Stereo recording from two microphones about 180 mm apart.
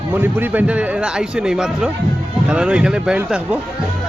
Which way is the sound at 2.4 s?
5° right (ahead or behind).